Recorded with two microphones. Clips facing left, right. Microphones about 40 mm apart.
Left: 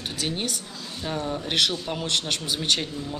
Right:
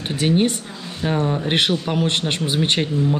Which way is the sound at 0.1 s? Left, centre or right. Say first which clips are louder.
Right 13 dB; right.